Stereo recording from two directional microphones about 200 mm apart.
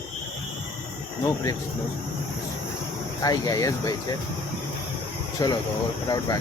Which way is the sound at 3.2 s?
15° left (ahead or behind).